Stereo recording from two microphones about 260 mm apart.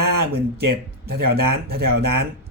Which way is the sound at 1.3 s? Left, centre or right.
Right.